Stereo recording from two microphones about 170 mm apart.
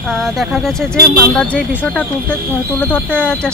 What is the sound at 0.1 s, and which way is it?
A woman's voice, centre (ahead or behind).